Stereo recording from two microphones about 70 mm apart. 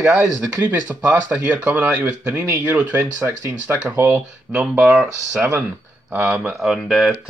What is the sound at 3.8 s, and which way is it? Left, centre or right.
Speech, right.